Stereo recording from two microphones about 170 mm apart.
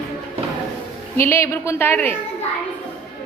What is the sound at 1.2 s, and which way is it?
Speech, 15° left (ahead or behind).